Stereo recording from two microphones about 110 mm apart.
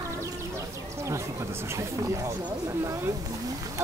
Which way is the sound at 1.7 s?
25° right (ahead or behind).